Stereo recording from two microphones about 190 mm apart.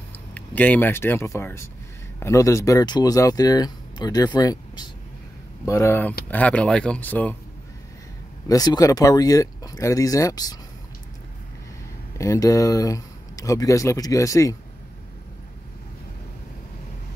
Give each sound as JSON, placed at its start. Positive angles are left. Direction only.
{"t": 0.1, "sound": "speech", "side_deg": 10}
{"t": 8.5, "sound": "speech", "side_deg": 20}
{"t": 12.2, "sound": "speech", "side_deg": 15}